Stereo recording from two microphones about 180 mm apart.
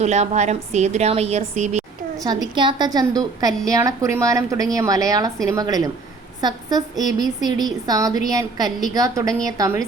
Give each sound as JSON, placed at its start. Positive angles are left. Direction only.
{"t": 0.0, "sound": "a woman's voice", "side_deg": -40}
{"t": 2.1, "sound": "a woman's voice", "side_deg": -20}